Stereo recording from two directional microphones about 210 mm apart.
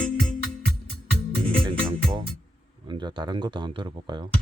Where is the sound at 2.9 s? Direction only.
20° right (ahead or behind).